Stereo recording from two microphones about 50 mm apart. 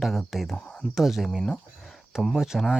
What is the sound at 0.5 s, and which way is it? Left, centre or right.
Speech, left.